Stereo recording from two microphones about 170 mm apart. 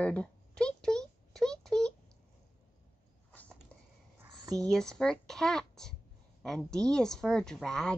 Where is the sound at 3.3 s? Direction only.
10° left (ahead or behind).